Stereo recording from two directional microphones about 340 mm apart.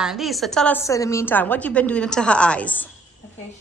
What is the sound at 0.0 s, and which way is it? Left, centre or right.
A woman's voice, centre.